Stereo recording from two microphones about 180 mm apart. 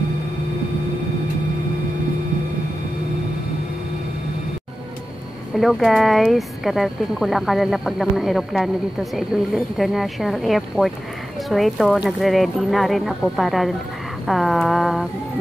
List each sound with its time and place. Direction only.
5.6 s speech: centre (ahead or behind)